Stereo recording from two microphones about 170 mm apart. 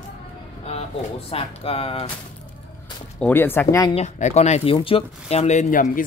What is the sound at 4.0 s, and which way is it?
Speech, 40° left (ahead or behind).